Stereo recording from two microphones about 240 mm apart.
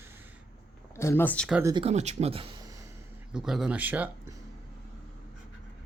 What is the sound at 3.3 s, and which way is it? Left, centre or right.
Speech, centre.